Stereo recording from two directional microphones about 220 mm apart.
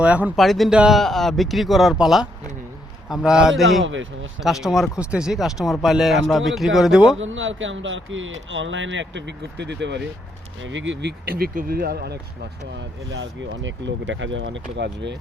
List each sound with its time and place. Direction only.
0.0 s speech: 5° right (ahead or behind)
3.8 s speech: 60° right (ahead or behind)
4.4 s speech: centre (ahead or behind)
7.2 s speech: 60° right (ahead or behind); by 12.1 s 45° right (ahead or behind)
13.1 s speech: 55° right (ahead or behind)